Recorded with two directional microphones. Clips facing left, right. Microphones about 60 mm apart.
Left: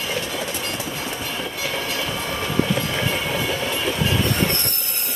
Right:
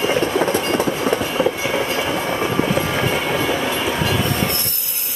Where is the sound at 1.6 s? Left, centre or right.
Right.